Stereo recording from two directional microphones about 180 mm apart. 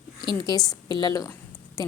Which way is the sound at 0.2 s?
25° left (ahead or behind).